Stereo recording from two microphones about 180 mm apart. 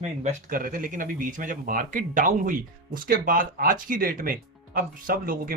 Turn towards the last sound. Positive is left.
turn(degrees=-55)  # may be behind; listen again after turning